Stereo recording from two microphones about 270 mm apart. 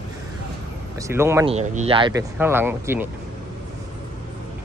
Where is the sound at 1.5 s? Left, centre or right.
Right; by 3.1 s centre.